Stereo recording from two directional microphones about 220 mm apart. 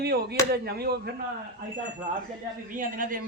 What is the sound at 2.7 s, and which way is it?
Speech, 40° right (ahead or behind).